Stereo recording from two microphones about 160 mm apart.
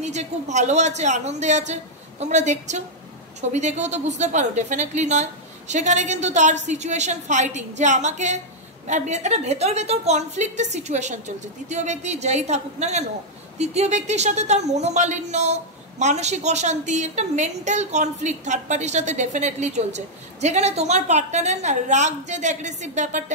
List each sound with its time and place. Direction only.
0.0 s speech: 45° right (ahead or behind)